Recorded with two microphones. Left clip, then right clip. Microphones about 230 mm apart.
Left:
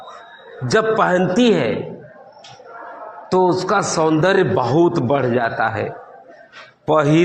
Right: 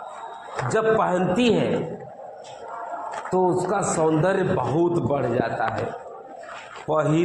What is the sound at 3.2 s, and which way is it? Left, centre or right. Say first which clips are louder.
A man's voice: left 6 dB; left.